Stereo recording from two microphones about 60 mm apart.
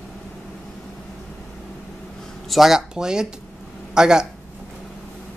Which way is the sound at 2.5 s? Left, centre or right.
Centre.